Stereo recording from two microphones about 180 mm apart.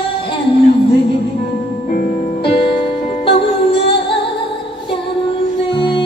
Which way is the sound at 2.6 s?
30° left (ahead or behind).